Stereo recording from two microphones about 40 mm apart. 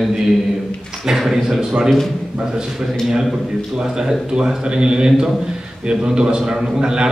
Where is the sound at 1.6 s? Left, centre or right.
Centre.